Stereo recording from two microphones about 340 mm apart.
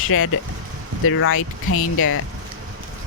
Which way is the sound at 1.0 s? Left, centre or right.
Left.